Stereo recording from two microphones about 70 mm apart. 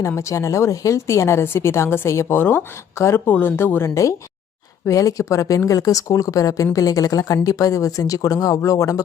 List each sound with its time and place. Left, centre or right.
0.2 s a woman's voice: left
4.9 s a woman's voice: left